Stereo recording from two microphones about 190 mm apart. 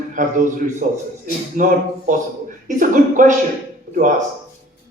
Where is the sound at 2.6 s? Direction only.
45° right (ahead or behind).